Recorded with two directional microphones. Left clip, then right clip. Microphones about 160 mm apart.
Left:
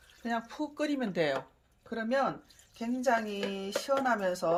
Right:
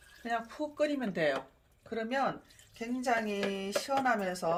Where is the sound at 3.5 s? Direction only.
40° left (ahead or behind).